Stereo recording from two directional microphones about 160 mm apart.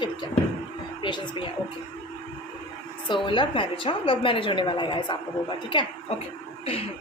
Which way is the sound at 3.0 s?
30° left (ahead or behind).